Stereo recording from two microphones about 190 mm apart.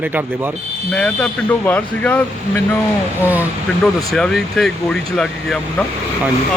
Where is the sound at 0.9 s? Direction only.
5° left (ahead or behind).